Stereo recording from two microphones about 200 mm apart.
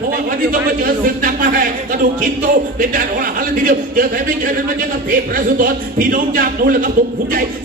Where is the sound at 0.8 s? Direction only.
45° right (ahead or behind).